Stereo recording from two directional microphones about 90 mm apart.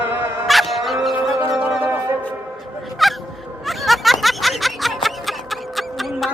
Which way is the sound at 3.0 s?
Centre (ahead or behind).